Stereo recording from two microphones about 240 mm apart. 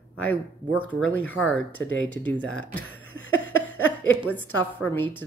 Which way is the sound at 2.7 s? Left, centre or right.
Centre.